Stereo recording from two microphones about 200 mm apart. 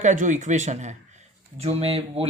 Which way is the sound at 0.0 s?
35° right (ahead or behind).